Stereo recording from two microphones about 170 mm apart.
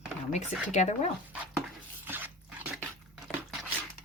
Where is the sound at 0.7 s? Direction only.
45° left (ahead or behind).